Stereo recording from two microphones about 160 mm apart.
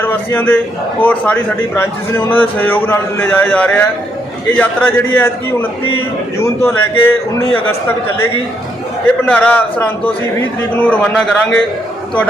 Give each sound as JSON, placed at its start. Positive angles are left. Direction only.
{"t": 0.0, "sound": "a man's voice", "side_deg": 10}
{"t": 9.3, "sound": "a man's voice", "side_deg": 10}